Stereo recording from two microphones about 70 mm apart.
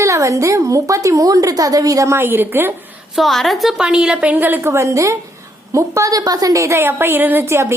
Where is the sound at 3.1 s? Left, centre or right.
Centre.